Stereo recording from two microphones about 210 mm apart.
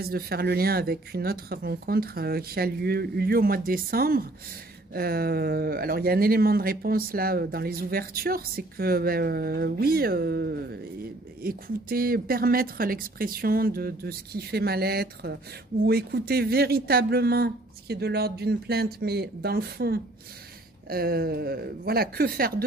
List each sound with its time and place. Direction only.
0.0 s speech: 45° right (ahead or behind)